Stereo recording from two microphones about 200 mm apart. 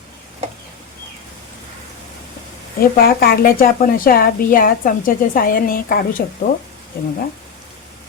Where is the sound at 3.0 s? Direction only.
50° left (ahead or behind).